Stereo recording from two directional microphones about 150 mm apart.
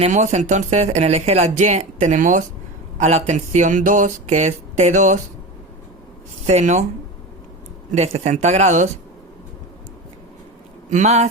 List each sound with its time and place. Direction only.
0.0 s speech: 50° right (ahead or behind)
6.4 s speech: 50° right (ahead or behind)
7.9 s speech: 45° right (ahead or behind)
10.9 s speech: 50° right (ahead or behind)